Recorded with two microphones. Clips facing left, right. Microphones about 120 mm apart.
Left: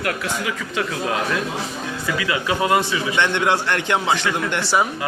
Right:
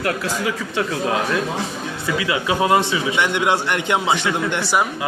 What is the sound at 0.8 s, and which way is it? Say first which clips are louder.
A man's voice: right 2 dB; 25° right (ahead or behind).